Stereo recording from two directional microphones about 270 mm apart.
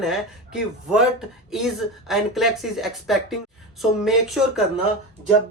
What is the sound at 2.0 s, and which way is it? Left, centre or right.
Speech, centre.